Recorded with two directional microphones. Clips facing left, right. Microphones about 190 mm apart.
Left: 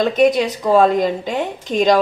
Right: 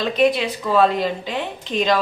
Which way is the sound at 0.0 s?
45° left (ahead or behind).